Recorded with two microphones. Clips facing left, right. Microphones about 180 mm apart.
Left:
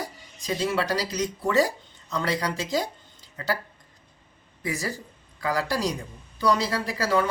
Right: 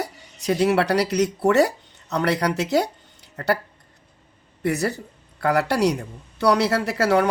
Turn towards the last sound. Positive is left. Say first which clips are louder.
# right 5 dB
turn(degrees=-70)  # may be behind; listen again after turning